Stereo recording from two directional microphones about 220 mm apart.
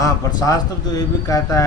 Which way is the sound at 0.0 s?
15° left (ahead or behind).